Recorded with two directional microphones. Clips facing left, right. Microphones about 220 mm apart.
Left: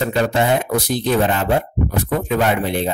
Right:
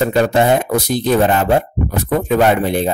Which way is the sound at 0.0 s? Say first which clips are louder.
Right 4 dB; 45° right (ahead or behind).